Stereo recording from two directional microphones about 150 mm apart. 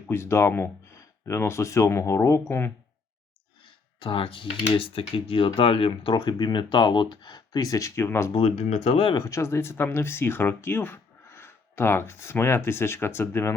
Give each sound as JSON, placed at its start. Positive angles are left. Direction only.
{"t": 0.1, "sound": "speech", "side_deg": 15}
{"t": 4.0, "sound": "speech", "side_deg": 35}
{"t": 8.3, "sound": "speech", "side_deg": 40}
{"t": 9.1, "sound": "speech", "side_deg": 20}